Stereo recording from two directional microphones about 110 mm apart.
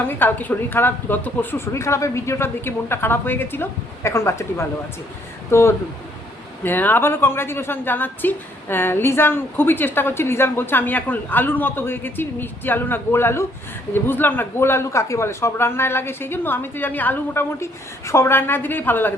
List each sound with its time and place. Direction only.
0.1 s speech: 15° left (ahead or behind)